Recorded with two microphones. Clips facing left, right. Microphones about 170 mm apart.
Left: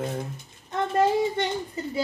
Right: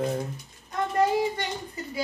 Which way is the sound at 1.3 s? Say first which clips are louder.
Left 5 dB; 25° left (ahead or behind).